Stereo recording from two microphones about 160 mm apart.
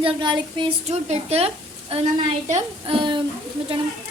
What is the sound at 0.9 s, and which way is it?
A woman's voice, 40° right (ahead or behind).